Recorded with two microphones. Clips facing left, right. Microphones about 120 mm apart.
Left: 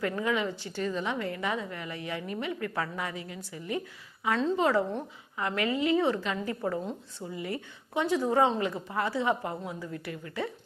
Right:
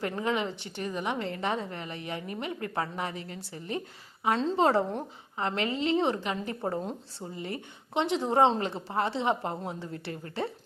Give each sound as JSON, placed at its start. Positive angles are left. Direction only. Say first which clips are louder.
{"t": 0.0, "sound": "a woman's voice", "louder": "left 1 dB", "side_deg": -25}